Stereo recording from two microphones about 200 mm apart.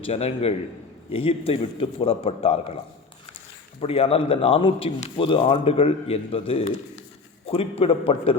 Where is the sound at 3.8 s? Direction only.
30° left (ahead or behind).